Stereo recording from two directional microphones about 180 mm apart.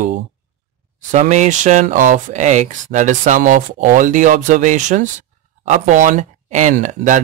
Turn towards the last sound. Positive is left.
turn(degrees=-45)  # may be behind; listen again after turning